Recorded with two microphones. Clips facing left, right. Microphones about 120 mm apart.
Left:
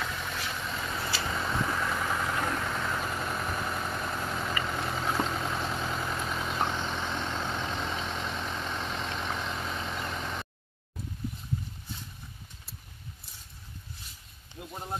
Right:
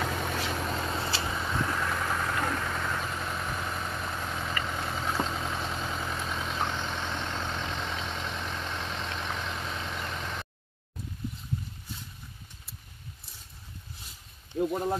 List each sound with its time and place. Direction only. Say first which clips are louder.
0.0 s vehicle: right 4 dB; 45° right (ahead or behind)
0.9 s vehicle: right 2 dB; 25° right (ahead or behind)
1.4 s vehicle: left 1 dB; 5° left (ahead or behind)
14.5 s a sound: right 17 dB; 80° right